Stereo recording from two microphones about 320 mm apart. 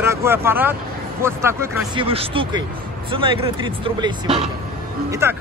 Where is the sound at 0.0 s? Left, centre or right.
Centre.